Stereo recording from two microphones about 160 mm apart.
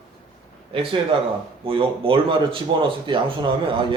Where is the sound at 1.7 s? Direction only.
35° right (ahead or behind).